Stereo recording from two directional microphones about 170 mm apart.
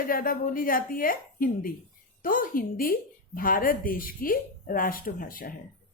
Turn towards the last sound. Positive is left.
turn(degrees=55)  # may be behind; listen again after turning